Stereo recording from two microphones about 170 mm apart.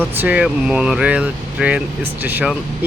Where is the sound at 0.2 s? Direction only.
5° right (ahead or behind).